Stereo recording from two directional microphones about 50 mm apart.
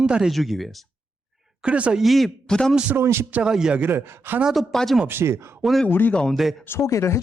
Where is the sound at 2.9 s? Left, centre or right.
Right.